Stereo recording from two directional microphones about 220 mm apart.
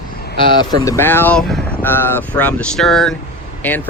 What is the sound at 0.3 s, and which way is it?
Speech, 20° left (ahead or behind).